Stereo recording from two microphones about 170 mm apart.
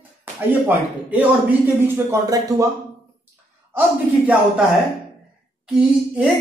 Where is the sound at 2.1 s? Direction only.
20° right (ahead or behind).